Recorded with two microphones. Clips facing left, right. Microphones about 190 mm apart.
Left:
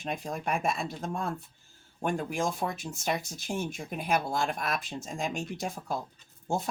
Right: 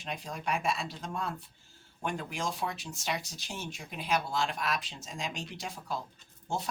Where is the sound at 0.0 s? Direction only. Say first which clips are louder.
Left 4 dB; 50° left (ahead or behind).